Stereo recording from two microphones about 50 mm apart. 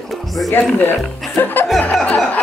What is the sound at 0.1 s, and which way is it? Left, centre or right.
Music, centre.